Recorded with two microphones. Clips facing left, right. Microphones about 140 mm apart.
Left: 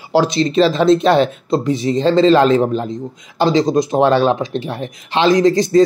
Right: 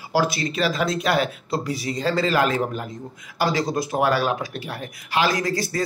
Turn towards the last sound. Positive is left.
turn(degrees=20)  # may be behind; listen again after turning